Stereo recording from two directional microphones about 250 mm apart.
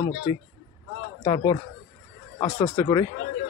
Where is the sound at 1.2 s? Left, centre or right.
Centre.